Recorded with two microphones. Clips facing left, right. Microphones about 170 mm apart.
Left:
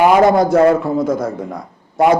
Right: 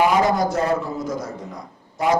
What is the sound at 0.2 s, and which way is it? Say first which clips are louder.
A man's voice: left 9 dB; 55° left (ahead or behind).